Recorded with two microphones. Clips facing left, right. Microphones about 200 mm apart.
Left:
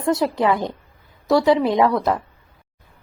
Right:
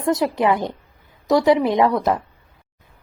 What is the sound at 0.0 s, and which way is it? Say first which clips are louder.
A woman's voice: even; 15° right (ahead or behind).